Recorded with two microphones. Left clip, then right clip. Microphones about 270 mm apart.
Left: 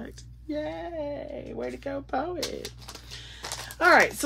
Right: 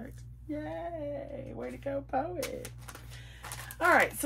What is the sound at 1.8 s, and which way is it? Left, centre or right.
Speech, left.